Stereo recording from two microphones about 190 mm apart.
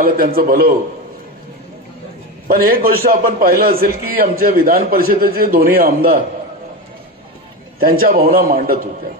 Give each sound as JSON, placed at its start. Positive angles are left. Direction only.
{"t": 0.0, "sound": "a man's voice", "side_deg": -50}
{"t": 2.4, "sound": "a man's voice", "side_deg": -50}
{"t": 7.8, "sound": "a man's voice", "side_deg": -50}